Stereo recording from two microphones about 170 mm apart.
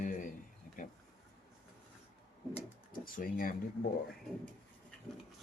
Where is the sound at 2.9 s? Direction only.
55° left (ahead or behind).